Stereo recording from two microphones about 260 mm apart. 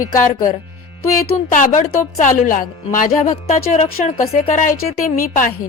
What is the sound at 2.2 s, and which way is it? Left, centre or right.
Speech, left.